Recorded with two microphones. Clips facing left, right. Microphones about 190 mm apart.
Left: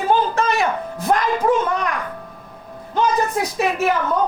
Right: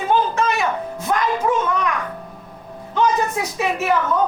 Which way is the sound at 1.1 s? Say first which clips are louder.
Left 2 dB; 45° left (ahead or behind).